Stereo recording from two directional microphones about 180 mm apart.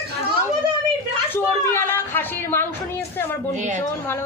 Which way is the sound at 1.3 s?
10° left (ahead or behind).